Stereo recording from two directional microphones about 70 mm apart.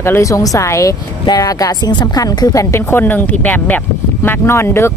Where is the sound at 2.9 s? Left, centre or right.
Left.